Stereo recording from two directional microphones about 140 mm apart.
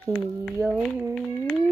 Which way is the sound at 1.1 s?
Centre (ahead or behind).